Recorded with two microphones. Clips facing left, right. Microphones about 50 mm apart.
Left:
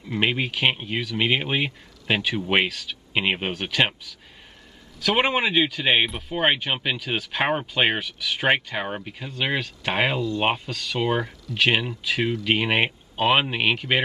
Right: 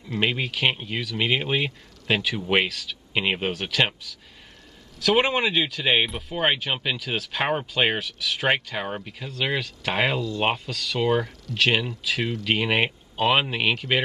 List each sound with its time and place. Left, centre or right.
0.1 s speech: centre